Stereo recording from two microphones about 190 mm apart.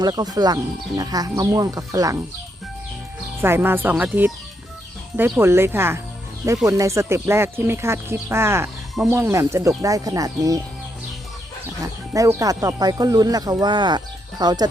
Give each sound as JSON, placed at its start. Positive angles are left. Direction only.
{"t": 0.0, "sound": "speech", "side_deg": -20}
{"t": 3.4, "sound": "speech", "side_deg": -10}
{"t": 11.8, "sound": "speech", "side_deg": -15}